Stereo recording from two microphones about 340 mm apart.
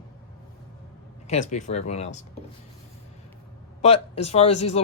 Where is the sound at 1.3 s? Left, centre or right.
Left.